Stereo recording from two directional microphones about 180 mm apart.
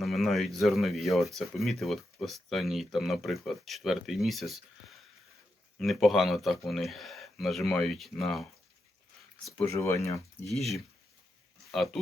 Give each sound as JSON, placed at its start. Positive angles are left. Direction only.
{"t": 0.0, "sound": "speech", "side_deg": 0}
{"t": 5.8, "sound": "speech", "side_deg": 0}
{"t": 9.6, "sound": "speech", "side_deg": 15}
{"t": 10.4, "sound": "speech", "side_deg": 0}